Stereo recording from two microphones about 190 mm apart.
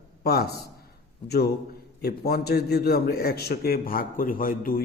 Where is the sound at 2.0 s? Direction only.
55° left (ahead or behind).